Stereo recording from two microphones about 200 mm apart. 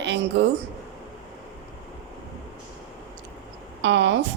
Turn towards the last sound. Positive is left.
turn(degrees=-60)  # may be behind; listen again after turning